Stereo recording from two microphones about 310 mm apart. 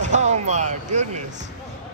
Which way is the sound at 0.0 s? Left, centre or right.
Right.